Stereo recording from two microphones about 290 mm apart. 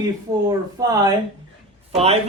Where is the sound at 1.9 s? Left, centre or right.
Right.